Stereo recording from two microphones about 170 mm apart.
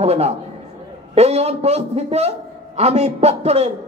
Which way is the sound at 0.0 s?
40° right (ahead or behind).